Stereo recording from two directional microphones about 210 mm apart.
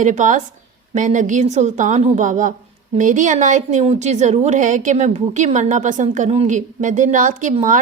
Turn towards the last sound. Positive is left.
turn(degrees=-35)  # may be behind; listen again after turning